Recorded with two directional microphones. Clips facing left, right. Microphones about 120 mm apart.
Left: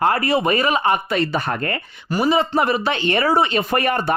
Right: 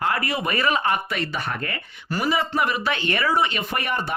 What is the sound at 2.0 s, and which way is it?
Speech, 20° left (ahead or behind).